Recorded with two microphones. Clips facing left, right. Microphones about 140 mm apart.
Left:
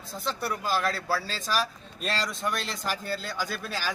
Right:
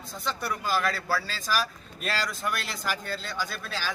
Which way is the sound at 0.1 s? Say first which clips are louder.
Left 1 dB; centre (ahead or behind).